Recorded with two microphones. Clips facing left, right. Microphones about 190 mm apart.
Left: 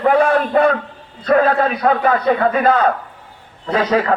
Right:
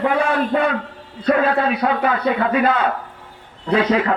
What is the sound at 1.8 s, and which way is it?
A man's voice, 40° left (ahead or behind).